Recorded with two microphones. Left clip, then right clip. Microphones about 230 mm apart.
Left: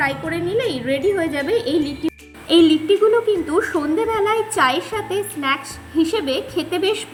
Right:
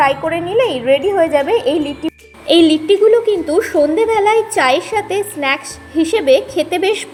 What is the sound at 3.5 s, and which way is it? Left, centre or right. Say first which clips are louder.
A woman's voice: right 6 dB; centre.